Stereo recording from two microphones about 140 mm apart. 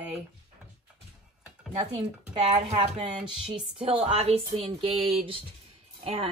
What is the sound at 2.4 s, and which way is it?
Speech, 45° right (ahead or behind).